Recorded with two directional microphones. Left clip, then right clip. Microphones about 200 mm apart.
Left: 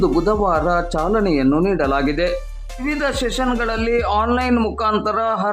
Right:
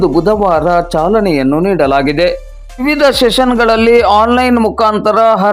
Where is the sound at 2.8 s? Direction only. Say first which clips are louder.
Right 12 dB; 30° right (ahead or behind).